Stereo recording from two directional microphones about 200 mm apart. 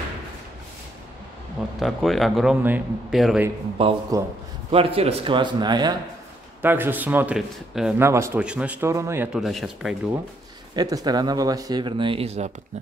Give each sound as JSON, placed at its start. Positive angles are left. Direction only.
{"t": 1.8, "sound": "speech", "side_deg": 0}
{"t": 3.7, "sound": "speech", "side_deg": -25}
{"t": 6.6, "sound": "speech", "side_deg": -10}
{"t": 8.0, "sound": "speech", "side_deg": -15}
{"t": 10.7, "sound": "speech", "side_deg": -20}